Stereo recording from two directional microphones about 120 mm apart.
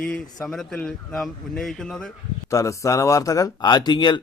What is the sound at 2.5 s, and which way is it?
Speech, 25° left (ahead or behind).